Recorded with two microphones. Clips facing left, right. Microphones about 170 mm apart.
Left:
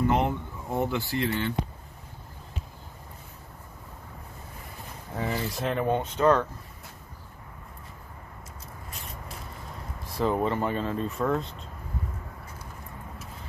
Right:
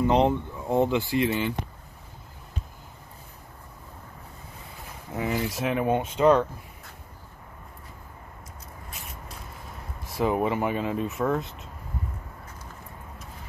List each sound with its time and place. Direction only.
0.0 s speech: 20° right (ahead or behind)
5.1 s speech: 10° right (ahead or behind)
10.1 s speech: 10° right (ahead or behind)